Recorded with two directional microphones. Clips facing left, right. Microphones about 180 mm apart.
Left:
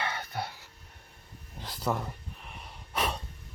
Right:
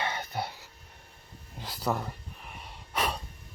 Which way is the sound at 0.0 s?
20° right (ahead or behind).